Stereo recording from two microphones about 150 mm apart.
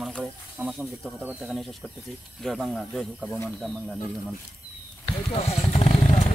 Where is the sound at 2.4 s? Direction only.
Centre (ahead or behind).